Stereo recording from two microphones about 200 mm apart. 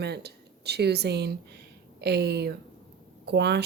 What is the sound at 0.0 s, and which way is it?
Speech, 55° right (ahead or behind).